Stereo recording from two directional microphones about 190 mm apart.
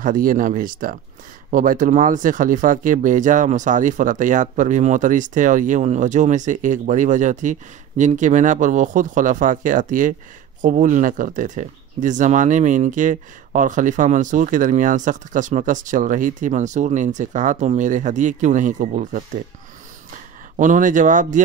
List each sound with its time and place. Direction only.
0.0 s speech: 45° right (ahead or behind)
20.5 s speech: 40° right (ahead or behind)